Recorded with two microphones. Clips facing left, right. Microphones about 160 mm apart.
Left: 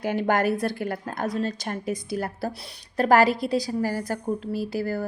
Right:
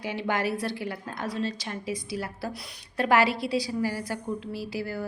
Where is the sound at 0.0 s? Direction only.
45° left (ahead or behind).